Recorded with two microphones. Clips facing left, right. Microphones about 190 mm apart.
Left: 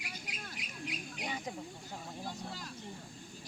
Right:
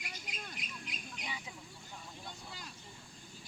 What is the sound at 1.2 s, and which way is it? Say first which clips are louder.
Bird: left 7 dB; 45° left (ahead or behind).